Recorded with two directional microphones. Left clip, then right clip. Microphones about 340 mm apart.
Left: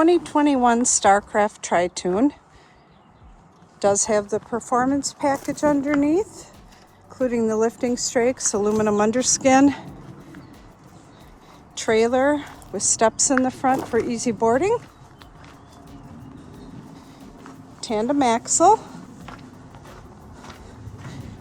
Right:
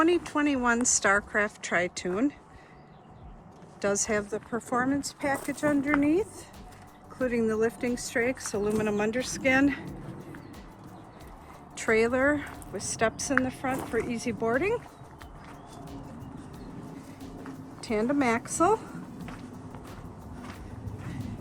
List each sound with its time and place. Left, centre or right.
0.0 s a woman's voice: centre
3.8 s a woman's voice: centre
11.8 s a woman's voice: centre
17.7 s speech: centre